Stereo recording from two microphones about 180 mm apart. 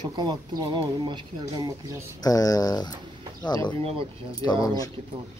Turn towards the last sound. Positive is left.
turn(degrees=20)  # may be behind; listen again after turning